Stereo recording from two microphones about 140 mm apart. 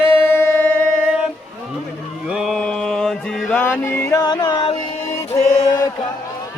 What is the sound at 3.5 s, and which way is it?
Music, 15° left (ahead or behind).